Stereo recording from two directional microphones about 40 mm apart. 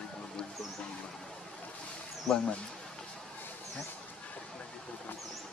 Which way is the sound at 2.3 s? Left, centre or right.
Centre.